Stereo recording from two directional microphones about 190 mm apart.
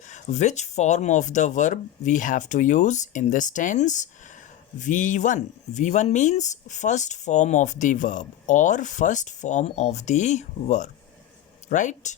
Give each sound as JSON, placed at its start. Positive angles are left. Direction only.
{"t": 0.0, "sound": "speech", "side_deg": 40}